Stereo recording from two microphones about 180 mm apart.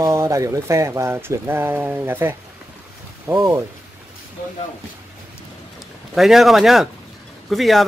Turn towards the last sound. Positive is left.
turn(degrees=0)  # may be behind; listen again after turning